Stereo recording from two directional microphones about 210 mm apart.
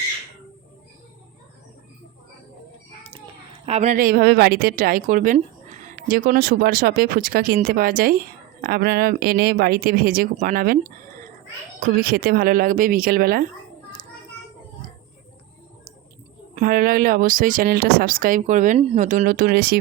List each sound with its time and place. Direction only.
3.7 s speech: 30° right (ahead or behind)
4.0 s a woman's voice: 50° right (ahead or behind)
16.6 s speech: 40° right (ahead or behind)